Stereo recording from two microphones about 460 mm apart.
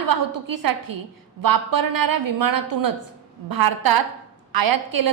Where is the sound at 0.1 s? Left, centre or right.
Right.